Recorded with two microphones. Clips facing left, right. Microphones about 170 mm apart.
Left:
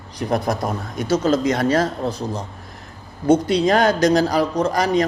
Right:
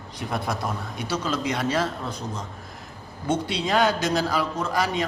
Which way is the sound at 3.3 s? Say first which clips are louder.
Left 10 dB; 45° left (ahead or behind).